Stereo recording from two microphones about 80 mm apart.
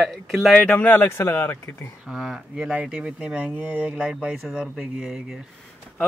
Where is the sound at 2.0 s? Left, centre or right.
Centre.